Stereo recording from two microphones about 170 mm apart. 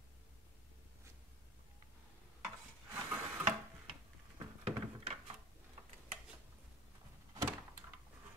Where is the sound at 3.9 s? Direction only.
35° right (ahead or behind).